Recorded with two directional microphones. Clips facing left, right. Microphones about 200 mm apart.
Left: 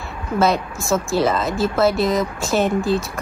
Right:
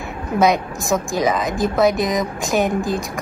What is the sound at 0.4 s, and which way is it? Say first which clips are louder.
A woman's voice: right 2 dB; 15° right (ahead or behind).